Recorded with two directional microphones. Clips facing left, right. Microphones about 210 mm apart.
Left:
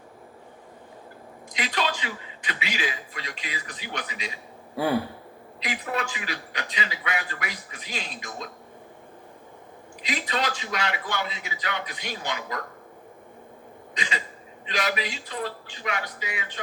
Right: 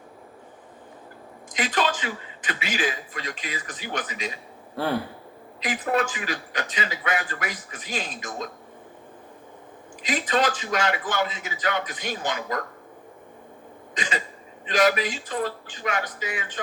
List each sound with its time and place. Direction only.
1.5 s a man's voice: 50° right (ahead or behind)
5.5 s a man's voice: 45° right (ahead or behind)
10.0 s a man's voice: 45° right (ahead or behind)
13.9 s throat clearing: 50° right (ahead or behind)
14.7 s a man's voice: 45° right (ahead or behind)